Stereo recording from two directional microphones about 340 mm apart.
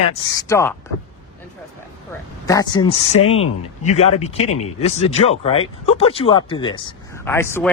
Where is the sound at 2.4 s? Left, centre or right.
Centre.